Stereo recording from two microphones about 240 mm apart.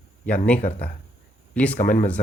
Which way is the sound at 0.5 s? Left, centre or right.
Left.